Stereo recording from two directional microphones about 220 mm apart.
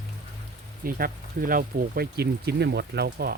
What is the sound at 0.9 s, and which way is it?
Speech, 40° right (ahead or behind).